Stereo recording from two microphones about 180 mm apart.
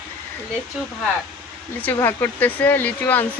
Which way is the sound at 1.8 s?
10° left (ahead or behind).